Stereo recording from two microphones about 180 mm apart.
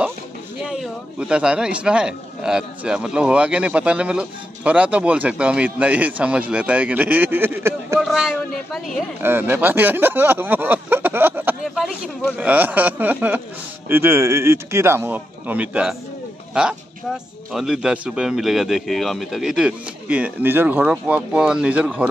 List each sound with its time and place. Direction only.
1.3 s a man's voice: 5° right (ahead or behind)
8.0 s a man's voice: centre (ahead or behind)
9.2 s a man's voice: 10° right (ahead or behind)